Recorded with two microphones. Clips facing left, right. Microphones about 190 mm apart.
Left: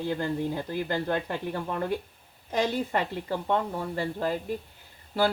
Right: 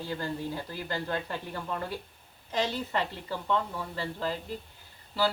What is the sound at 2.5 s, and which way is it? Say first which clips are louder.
Speech: left 4 dB; 50° left (ahead or behind).